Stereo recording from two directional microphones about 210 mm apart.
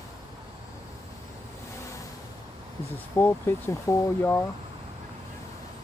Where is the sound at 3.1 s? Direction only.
10° left (ahead or behind).